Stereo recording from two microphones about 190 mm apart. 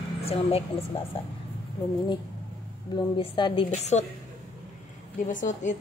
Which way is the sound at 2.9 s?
25° left (ahead or behind).